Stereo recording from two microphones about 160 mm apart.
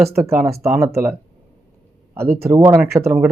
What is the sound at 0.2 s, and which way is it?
Speech, 20° right (ahead or behind).